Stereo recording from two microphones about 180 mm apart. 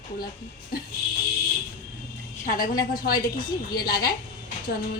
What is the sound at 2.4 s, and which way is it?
Speech, 50° left (ahead or behind).